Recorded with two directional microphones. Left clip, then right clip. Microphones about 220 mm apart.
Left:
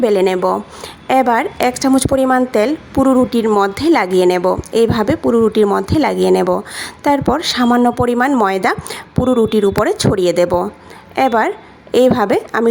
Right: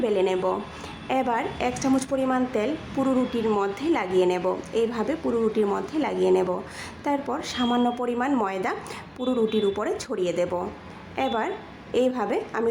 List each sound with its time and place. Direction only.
0.0 s a woman's voice: 40° left (ahead or behind)